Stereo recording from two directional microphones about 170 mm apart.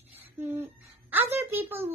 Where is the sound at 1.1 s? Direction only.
10° right (ahead or behind).